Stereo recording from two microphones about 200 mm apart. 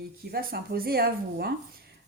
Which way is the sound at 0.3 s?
50° right (ahead or behind).